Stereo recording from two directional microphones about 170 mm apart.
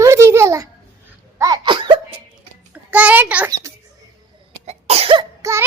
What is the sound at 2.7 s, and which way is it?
Child singing, 10° right (ahead or behind).